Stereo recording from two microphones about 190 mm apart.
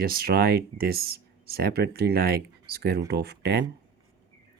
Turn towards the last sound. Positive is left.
turn(degrees=-60)  # may be behind; listen again after turning